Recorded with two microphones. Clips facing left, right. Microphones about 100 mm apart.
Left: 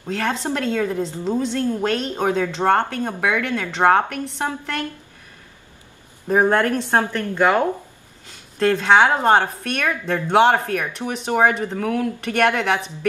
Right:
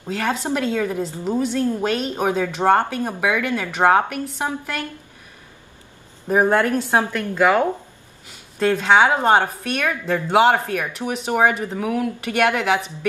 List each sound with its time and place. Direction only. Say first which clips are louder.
0.0 s a woman's voice: even; 5° right (ahead or behind)
6.2 s a woman's voice: even; 5° right (ahead or behind)